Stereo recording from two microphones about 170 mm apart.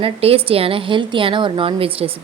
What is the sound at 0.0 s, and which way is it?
A woman's voice, 35° right (ahead or behind).